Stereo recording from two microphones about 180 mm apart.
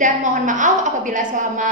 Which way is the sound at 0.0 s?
45° right (ahead or behind).